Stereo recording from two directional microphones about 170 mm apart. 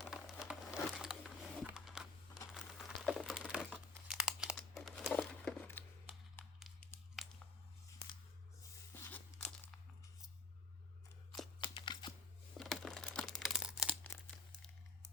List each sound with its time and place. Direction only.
0.0 s crumpling: 5° right (ahead or behind)
9.0 s tearing: 10° left (ahead or behind)
11.6 s a sound: 30° left (ahead or behind)
12.5 s computer keyboard: centre (ahead or behind)
14.0 s crumpling: 10° left (ahead or behind)